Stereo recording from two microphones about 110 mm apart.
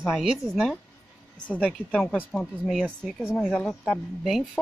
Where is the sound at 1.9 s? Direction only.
5° left (ahead or behind).